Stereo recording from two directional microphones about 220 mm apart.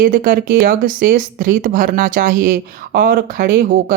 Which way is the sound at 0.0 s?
40° right (ahead or behind).